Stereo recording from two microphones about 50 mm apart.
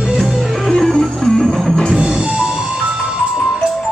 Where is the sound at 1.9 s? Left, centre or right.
Centre.